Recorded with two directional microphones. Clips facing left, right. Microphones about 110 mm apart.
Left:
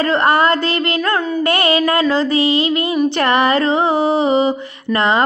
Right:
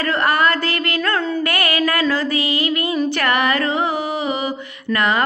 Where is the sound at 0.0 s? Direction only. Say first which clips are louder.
Left 4 dB; 25° left (ahead or behind).